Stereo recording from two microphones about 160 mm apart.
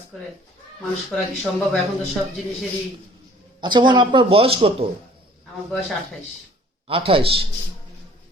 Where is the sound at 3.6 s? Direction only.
30° right (ahead or behind).